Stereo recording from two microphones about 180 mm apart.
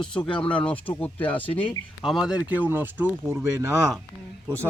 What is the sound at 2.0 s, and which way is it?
Speech, centre (ahead or behind).